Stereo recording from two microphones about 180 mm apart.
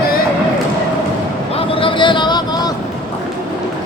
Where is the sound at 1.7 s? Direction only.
30° left (ahead or behind).